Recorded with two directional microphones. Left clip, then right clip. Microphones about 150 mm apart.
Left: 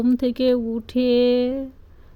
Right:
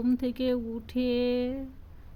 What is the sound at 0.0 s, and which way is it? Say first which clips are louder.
A woman's voice: left 9 dB; 30° left (ahead or behind).